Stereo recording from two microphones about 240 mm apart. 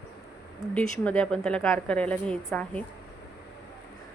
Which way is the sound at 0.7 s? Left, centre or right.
Centre.